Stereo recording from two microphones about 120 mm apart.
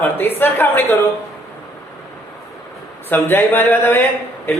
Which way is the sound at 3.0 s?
15° left (ahead or behind).